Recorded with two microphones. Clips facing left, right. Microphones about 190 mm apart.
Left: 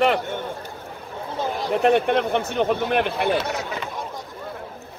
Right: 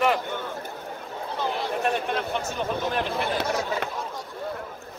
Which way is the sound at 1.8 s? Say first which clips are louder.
Left 11 dB; 65° left (ahead or behind).